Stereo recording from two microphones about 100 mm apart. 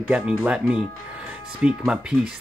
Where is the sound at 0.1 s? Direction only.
10° right (ahead or behind).